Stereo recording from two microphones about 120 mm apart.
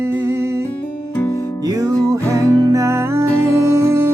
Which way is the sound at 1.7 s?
30° right (ahead or behind).